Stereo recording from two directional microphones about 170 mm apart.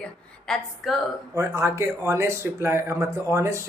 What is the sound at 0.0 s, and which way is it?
Speech, 5° left (ahead or behind).